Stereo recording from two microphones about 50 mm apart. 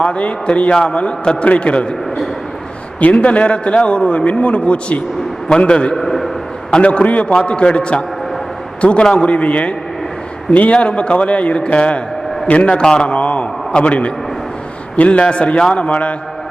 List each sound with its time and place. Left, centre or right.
0.0 s a man's voice: left
5.9 s a sound: centre
6.7 s a man's voice: left